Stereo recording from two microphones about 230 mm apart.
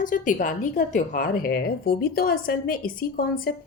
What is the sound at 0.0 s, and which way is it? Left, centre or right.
A woman's voice, left.